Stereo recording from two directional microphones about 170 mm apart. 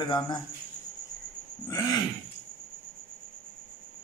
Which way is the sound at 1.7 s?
20° left (ahead or behind).